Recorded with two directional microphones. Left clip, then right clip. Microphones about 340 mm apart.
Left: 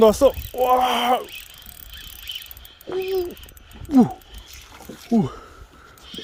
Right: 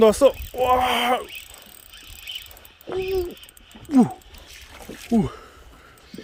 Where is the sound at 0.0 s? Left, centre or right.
Centre.